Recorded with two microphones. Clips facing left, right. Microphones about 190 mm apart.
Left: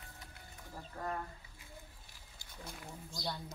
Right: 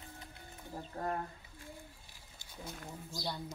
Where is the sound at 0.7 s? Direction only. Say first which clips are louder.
Right 3 dB; 35° right (ahead or behind).